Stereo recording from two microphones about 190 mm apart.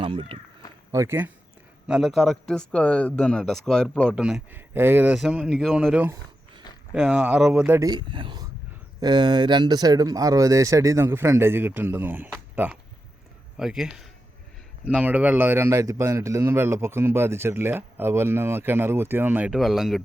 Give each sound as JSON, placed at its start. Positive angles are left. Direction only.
{"t": 0.0, "sound": "speech", "side_deg": -30}
{"t": 0.9, "sound": "speech", "side_deg": -15}
{"t": 1.9, "sound": "a man's voice", "side_deg": 0}
{"t": 7.8, "sound": "a man's voice", "side_deg": -20}